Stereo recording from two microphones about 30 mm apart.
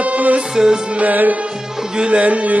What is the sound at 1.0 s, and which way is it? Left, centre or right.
Music, right.